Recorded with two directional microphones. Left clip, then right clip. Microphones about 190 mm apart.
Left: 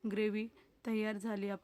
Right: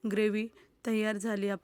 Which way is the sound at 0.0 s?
25° right (ahead or behind).